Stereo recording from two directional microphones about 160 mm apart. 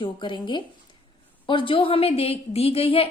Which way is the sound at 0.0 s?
30° left (ahead or behind).